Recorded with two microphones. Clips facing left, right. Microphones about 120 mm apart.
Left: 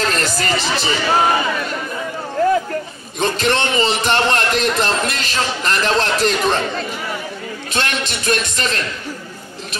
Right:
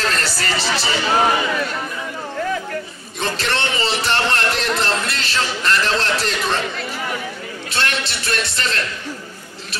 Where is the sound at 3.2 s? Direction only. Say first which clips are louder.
Left 5 dB; 20° left (ahead or behind).